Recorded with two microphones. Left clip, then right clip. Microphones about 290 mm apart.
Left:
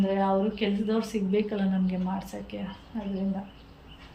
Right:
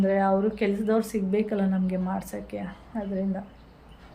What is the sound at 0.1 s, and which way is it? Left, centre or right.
A woman's voice, centre.